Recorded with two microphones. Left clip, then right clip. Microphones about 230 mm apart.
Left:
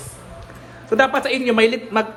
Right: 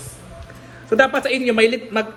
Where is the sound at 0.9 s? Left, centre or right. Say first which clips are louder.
Right 1 dB; centre.